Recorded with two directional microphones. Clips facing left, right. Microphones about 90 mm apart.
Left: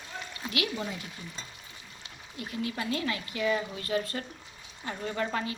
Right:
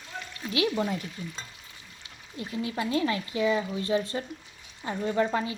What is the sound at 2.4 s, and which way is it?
Speech, 25° right (ahead or behind).